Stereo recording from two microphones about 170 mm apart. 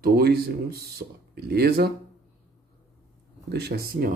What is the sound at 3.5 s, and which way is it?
Speech, 70° right (ahead or behind).